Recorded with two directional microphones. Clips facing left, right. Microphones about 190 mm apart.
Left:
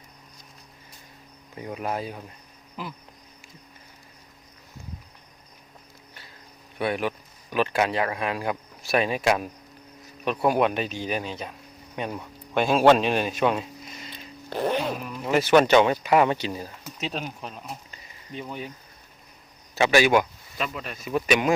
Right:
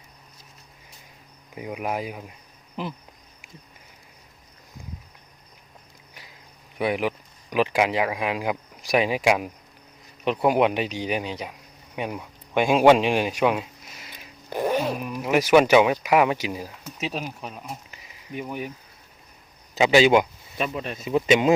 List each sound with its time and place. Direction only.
1.5 s speech: 10° right (ahead or behind)
6.7 s speech: 15° right (ahead or behind)
11.9 s a sound: 10° right (ahead or behind)
15.0 s speech: 15° right (ahead or behind)
19.7 s speech: 20° right (ahead or behind)